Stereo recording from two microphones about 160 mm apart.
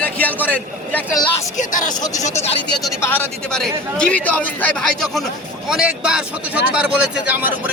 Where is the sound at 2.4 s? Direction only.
40° left (ahead or behind).